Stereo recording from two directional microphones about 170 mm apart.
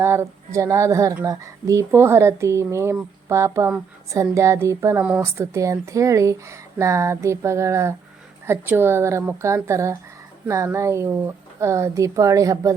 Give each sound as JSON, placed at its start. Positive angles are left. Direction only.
{"t": 0.0, "sound": "speech", "side_deg": -15}